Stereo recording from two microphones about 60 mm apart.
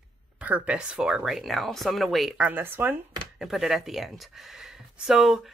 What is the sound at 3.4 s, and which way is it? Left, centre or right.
Speech, centre.